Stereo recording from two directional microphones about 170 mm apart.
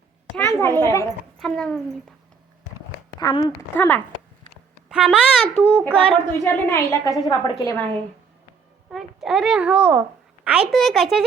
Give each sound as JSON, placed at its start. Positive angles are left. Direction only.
{"t": 0.3, "sound": "a sound", "side_deg": 15}
{"t": 0.8, "sound": "a woman's voice", "side_deg": 15}
{"t": 1.4, "sound": "a child's voice", "side_deg": 0}
{"t": 3.2, "sound": "speech", "side_deg": 20}
{"t": 3.8, "sound": "a woman's voice", "side_deg": 10}
{"t": 4.9, "sound": "a child's voice", "side_deg": -5}
{"t": 6.0, "sound": "a woman's voice", "side_deg": 10}
{"t": 8.9, "sound": "a child's voice", "side_deg": 0}